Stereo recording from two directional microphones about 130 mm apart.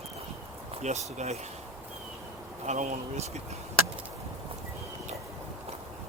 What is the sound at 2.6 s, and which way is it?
Speech, 65° right (ahead or behind).